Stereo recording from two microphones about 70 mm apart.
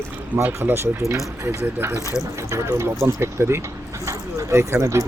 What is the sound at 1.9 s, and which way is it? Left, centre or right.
Speech, left.